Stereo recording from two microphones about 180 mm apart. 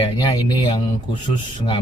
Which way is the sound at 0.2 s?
25° left (ahead or behind).